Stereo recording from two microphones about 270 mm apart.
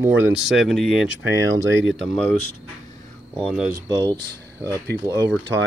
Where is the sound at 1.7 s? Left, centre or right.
Right.